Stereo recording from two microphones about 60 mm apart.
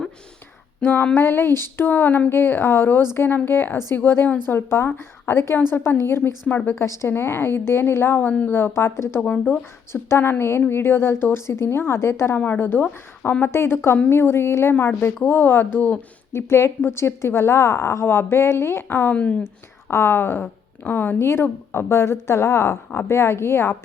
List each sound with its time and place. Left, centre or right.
0.8 s a sound: left
1.1 s a woman's voice: left
5.5 s a woman's voice: left
8.3 s speech: left
8.5 s a woman's voice: left
9.2 s speech: left
9.9 s a woman's voice: left
16.3 s a woman's voice: left
19.1 s speech: left
19.9 s a woman's voice: left